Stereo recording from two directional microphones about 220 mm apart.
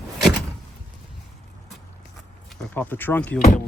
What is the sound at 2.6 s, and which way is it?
Speech, 5° left (ahead or behind).